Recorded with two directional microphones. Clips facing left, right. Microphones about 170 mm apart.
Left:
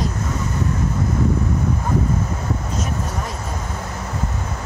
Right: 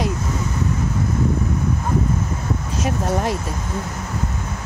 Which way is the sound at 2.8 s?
90° right.